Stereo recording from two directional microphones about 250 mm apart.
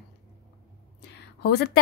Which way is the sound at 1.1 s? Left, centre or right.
Left.